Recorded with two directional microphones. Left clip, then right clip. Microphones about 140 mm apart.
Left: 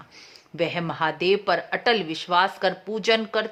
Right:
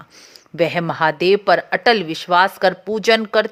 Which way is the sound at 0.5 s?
40° right (ahead or behind).